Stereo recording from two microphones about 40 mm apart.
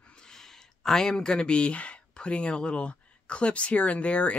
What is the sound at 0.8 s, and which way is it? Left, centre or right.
Speech, centre.